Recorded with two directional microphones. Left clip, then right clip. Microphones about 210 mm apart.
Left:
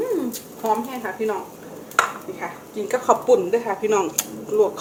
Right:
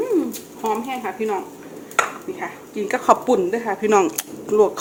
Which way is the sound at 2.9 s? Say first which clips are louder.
Even; 45° right (ahead or behind).